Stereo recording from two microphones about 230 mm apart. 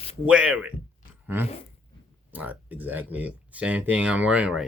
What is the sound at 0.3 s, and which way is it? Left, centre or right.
Speech, centre.